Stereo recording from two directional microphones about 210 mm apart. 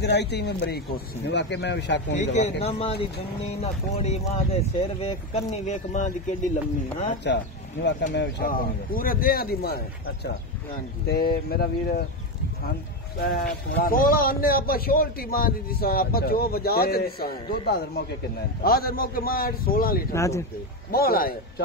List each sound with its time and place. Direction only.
0.0 s speech: 55° left (ahead or behind)
2.1 s speech: 35° left (ahead or behind)
8.1 s a man's voice: 55° left (ahead or behind)
11.1 s a man's voice: 50° left (ahead or behind)
13.5 s a man's voice: 45° left (ahead or behind)
20.1 s speech: 15° left (ahead or behind)
20.9 s a man's voice: 45° left (ahead or behind)